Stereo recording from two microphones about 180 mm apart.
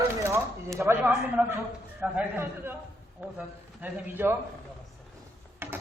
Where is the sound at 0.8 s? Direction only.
15° right (ahead or behind).